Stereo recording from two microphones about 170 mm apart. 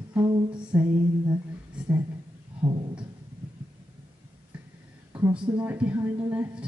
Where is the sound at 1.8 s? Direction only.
5° right (ahead or behind).